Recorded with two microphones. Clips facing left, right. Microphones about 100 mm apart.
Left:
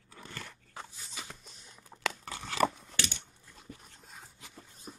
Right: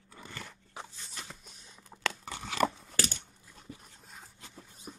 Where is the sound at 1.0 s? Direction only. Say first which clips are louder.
Even; 5° left (ahead or behind).